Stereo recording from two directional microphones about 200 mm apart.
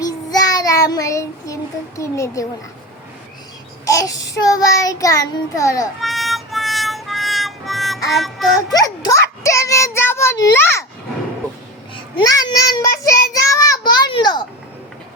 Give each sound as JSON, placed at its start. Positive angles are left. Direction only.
{"t": 0.0, "sound": "child singing", "side_deg": 20}
{"t": 3.8, "sound": "child singing", "side_deg": 15}
{"t": 6.0, "sound": "music", "side_deg": 0}
{"t": 8.8, "sound": "child singing", "side_deg": 20}
{"t": 12.1, "sound": "a sound", "side_deg": 20}
{"t": 13.5, "sound": "child singing", "side_deg": 15}